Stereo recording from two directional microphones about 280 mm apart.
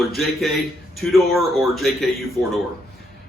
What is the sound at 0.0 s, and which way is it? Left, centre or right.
Speech, centre.